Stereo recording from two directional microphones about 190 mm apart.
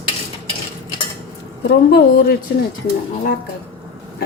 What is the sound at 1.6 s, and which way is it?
Speech, 55° left (ahead or behind).